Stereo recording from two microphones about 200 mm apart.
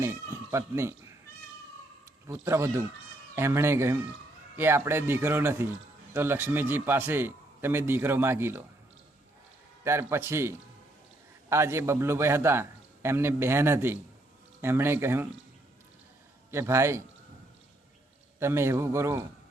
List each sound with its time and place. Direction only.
0.0 s cat: 15° right (ahead or behind)
2.3 s a man's voice: 15° right (ahead or behind)
9.8 s a man's voice: 15° right (ahead or behind)
16.5 s a man's voice: 15° right (ahead or behind)
18.3 s a man's voice: 15° right (ahead or behind)